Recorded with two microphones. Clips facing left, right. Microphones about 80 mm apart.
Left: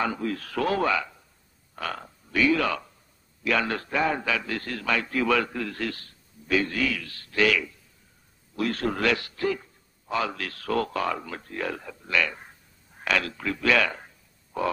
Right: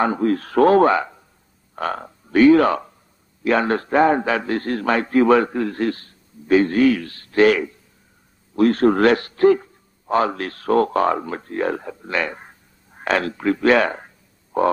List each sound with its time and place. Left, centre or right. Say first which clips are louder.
0.0 s a man's voice: right 9 dB; right
12.9 s a sound: right 6 dB; right
13.5 s a man's voice: right 8 dB; right
14.5 s grunt: right 9 dB; right